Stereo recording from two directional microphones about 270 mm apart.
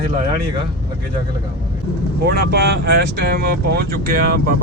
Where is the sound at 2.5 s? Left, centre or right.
Right.